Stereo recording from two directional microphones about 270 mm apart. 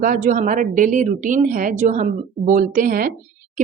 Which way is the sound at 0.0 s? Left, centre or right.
Right.